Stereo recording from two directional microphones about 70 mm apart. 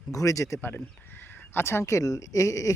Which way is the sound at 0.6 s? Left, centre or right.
Left.